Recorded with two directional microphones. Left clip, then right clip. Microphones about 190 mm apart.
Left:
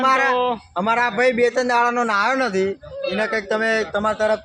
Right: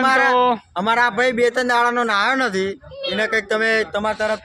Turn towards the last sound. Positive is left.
turn(degrees=-10)  # may be behind; listen again after turning